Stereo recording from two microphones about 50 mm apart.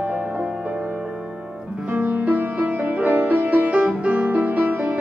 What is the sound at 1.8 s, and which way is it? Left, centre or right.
Music, right.